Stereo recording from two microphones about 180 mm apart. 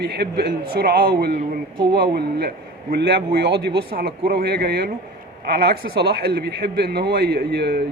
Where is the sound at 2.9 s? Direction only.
65° right (ahead or behind).